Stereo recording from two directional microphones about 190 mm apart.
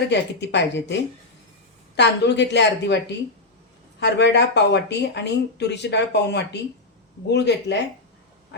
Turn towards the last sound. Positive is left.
turn(degrees=65)  # may be behind; listen again after turning